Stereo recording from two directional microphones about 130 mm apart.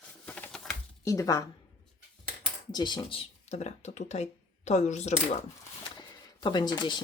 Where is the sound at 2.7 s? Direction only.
35° left (ahead or behind); by 5.1 s 60° left (ahead or behind).